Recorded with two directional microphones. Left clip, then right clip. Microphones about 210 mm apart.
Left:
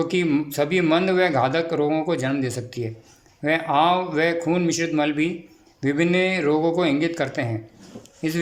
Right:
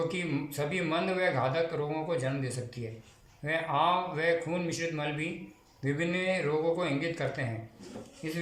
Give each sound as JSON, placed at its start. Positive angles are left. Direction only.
{"t": 0.1, "sound": "a man's voice", "side_deg": 50}